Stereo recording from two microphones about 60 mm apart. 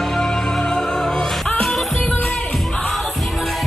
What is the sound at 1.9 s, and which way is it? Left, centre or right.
Music, centre.